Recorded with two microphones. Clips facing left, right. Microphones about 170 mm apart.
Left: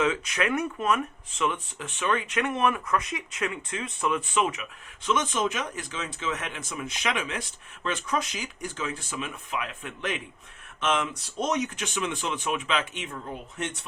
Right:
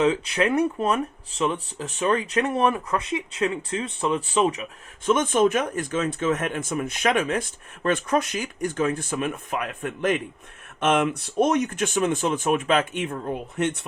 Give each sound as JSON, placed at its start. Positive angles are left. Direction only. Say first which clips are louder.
{"t": 0.0, "sound": "speech", "louder": "right 5 dB", "side_deg": -30}
{"t": 5.0, "sound": "speech", "louder": "right 7 dB", "side_deg": -50}